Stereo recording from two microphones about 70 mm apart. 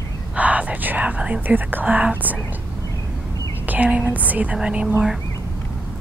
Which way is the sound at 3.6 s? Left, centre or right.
Right.